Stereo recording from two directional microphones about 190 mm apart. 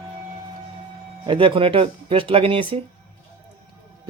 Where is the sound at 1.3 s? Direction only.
30° right (ahead or behind).